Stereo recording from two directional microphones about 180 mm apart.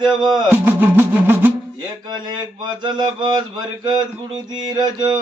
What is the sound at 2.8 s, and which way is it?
Music, 25° right (ahead or behind).